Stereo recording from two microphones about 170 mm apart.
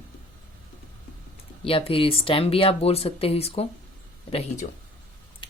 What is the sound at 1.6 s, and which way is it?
Speech, 35° left (ahead or behind).